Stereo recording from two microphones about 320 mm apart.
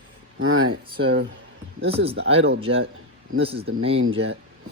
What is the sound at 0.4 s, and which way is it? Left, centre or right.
Speech, right.